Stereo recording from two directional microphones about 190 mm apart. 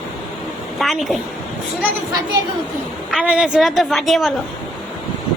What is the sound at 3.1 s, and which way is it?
A woman's voice, 5° right (ahead or behind).